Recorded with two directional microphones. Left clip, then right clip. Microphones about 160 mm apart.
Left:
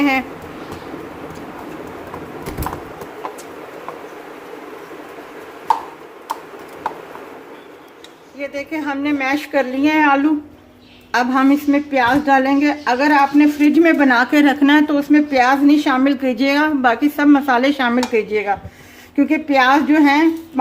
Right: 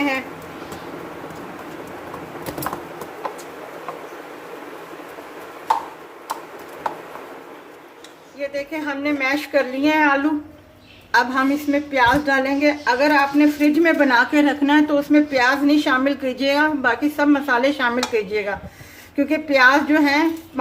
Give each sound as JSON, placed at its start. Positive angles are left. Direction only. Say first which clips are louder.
{"t": 0.0, "sound": "speech", "louder": "left 5 dB", "side_deg": 55}
{"t": 8.4, "sound": "a woman's voice", "louder": "left 1 dB", "side_deg": 45}